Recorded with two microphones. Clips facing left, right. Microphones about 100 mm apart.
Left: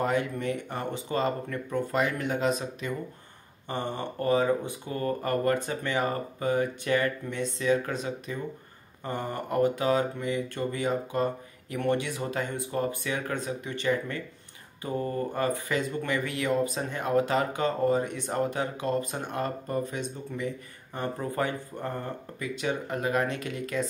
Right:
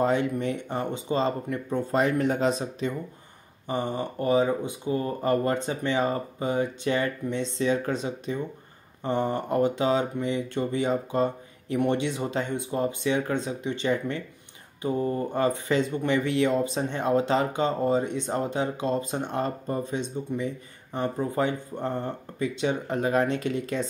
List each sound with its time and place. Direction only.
0.0 s speech: 25° right (ahead or behind)
3.6 s speech: 15° right (ahead or behind)